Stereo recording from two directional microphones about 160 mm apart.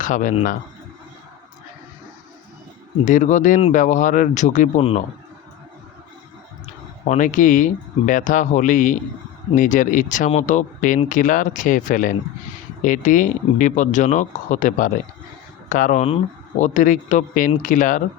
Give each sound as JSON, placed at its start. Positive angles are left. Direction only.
{"t": 0.0, "sound": "speech", "side_deg": 55}
{"t": 3.0, "sound": "speech", "side_deg": 50}
{"t": 7.1, "sound": "speech", "side_deg": 55}